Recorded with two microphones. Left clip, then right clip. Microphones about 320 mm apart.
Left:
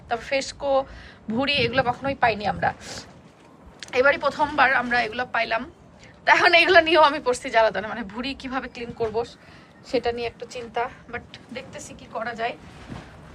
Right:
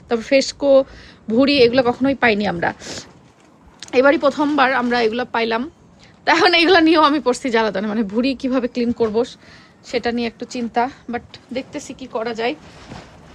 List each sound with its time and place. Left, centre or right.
0.1 s a woman's voice: centre